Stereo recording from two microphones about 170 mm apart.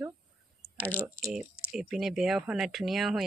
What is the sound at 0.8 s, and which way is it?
Speech, 10° left (ahead or behind).